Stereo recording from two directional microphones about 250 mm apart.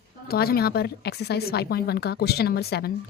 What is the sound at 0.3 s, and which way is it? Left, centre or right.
A woman's voice, left.